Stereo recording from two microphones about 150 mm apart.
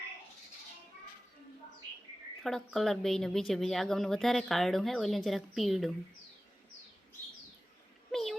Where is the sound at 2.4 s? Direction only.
Centre (ahead or behind).